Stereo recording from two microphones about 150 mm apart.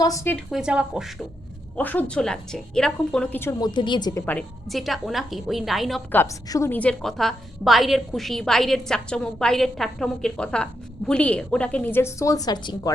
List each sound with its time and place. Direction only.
0.0 s a woman's voice: 20° left (ahead or behind)
0.3 s a woman's voice: 5° right (ahead or behind)
1.7 s a woman's voice: 10° left (ahead or behind)
3.6 s a woman's voice: 30° left (ahead or behind)
4.1 s a woman's voice: 10° left (ahead or behind)
4.7 s a woman's voice: centre (ahead or behind)
6.1 s a woman's voice: 15° left (ahead or behind)